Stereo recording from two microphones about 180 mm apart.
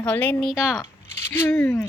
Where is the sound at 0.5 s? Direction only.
5° right (ahead or behind).